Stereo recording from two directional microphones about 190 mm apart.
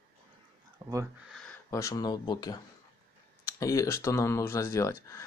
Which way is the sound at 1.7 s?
15° left (ahead or behind).